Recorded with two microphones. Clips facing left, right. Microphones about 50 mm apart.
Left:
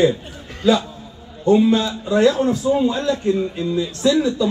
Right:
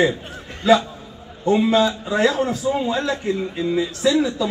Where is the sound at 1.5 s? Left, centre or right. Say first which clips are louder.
Left 2 dB; right.